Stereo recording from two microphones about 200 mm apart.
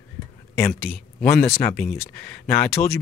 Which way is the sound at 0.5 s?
10° left (ahead or behind).